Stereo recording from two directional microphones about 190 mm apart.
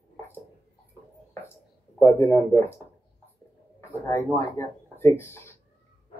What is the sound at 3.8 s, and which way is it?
Speech, 15° left (ahead or behind).